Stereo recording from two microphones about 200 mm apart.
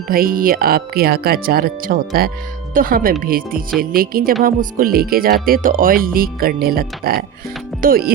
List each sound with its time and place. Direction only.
0.1 s speech: 45° right (ahead or behind)